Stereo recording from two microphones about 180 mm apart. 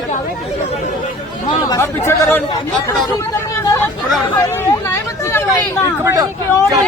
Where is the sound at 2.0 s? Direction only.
15° left (ahead or behind).